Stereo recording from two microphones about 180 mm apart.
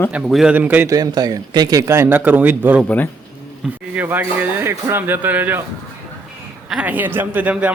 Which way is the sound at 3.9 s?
10° right (ahead or behind).